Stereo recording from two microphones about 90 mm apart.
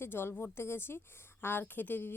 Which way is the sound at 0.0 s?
25° left (ahead or behind).